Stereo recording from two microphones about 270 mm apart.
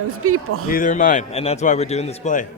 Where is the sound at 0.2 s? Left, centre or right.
Right.